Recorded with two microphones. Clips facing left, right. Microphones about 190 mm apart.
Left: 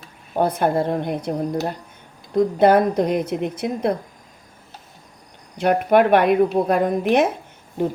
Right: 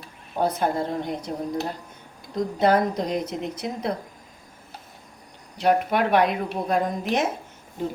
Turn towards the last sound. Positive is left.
turn(degrees=65)  # may be behind; listen again after turning